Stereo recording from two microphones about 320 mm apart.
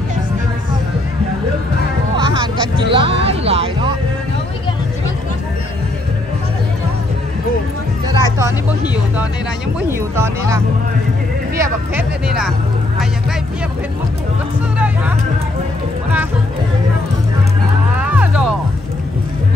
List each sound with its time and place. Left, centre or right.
2.1 s music: centre
8.1 s music: centre
9.8 s speech: centre
18.1 s music: centre